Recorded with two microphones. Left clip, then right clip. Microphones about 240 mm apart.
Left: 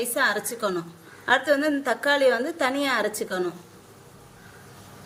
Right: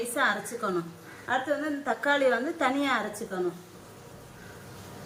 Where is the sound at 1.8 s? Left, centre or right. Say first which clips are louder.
Left 4 dB; left.